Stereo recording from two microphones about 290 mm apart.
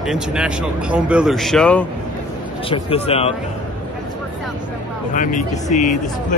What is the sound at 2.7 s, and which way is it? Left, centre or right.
Speech, centre.